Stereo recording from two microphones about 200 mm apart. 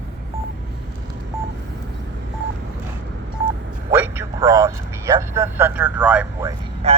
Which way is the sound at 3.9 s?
10° right (ahead or behind).